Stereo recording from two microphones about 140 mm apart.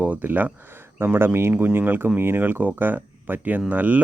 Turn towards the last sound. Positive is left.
turn(degrees=-10)  # may be behind; listen again after turning